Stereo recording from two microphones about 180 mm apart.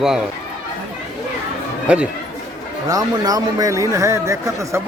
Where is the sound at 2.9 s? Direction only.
20° right (ahead or behind).